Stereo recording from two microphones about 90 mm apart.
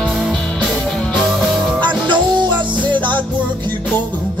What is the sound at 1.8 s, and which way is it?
Music, 60° right (ahead or behind).